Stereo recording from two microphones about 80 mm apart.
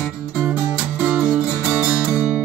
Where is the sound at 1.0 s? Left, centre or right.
Centre.